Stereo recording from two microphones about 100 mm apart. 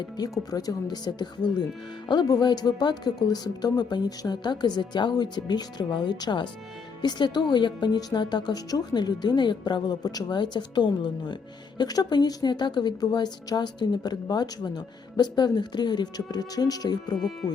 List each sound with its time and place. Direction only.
0.2 s a woman's voice: 40° left (ahead or behind)
17.4 s speech: centre (ahead or behind)